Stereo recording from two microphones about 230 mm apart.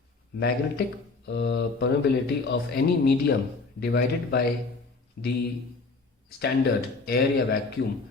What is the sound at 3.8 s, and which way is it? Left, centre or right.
A man's voice, left.